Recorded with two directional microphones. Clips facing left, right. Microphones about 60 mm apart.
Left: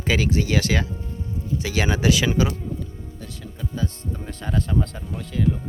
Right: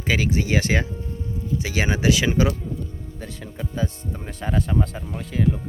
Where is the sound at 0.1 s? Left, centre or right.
Centre.